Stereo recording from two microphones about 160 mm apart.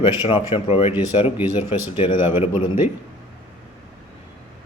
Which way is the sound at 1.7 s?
30° left (ahead or behind).